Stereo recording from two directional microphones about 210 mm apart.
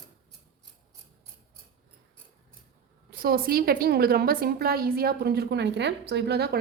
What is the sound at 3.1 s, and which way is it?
A woman's voice, 45° right (ahead or behind).